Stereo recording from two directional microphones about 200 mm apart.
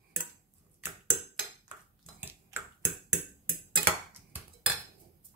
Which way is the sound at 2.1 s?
10° right (ahead or behind).